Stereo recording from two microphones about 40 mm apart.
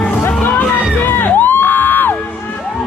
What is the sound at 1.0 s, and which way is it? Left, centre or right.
Music, left.